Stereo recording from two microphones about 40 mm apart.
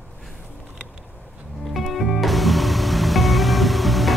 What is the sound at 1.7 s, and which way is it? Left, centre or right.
Music, centre.